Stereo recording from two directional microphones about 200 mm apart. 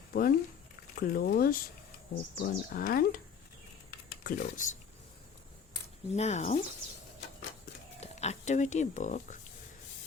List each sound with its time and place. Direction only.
0.1 s speech: 45° left (ahead or behind)
4.2 s speech: 45° left (ahead or behind)
6.1 s speech: 35° left (ahead or behind)
8.0 s speech: 35° left (ahead or behind)